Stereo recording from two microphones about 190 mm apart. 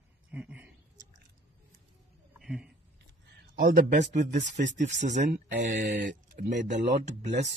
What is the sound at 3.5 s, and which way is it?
Speech, 45° right (ahead or behind).